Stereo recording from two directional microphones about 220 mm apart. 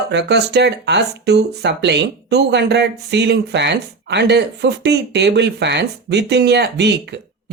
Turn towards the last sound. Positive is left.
turn(degrees=-50)  # may be behind; listen again after turning